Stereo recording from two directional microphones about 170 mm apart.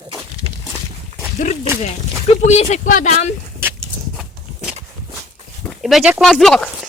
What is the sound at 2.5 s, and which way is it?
Speech, 40° left (ahead or behind).